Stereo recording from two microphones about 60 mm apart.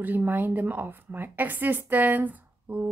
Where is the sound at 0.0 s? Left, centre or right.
Right.